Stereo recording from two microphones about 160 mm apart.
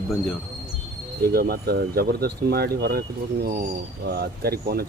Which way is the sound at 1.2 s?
75° right (ahead or behind).